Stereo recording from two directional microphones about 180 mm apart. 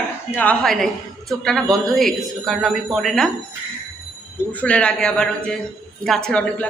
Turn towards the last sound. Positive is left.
turn(degrees=5)  # may be behind; listen again after turning